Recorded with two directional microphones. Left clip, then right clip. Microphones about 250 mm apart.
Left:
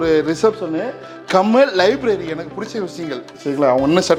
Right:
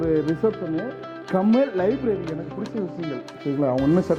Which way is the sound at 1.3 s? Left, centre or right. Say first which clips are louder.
Left 8 dB; centre.